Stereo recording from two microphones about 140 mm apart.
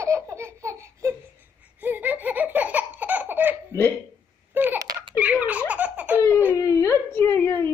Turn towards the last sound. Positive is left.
turn(degrees=15)  # may be behind; listen again after turning